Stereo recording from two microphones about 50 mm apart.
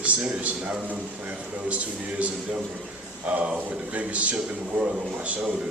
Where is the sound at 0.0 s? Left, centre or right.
Right.